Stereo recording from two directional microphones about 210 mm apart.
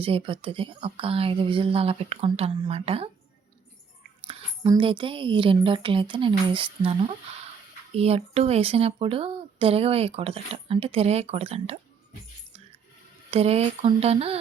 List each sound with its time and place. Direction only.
0.0 s speech: 25° right (ahead or behind)
4.3 s speech: 25° right (ahead or behind)
13.3 s speech: 30° right (ahead or behind)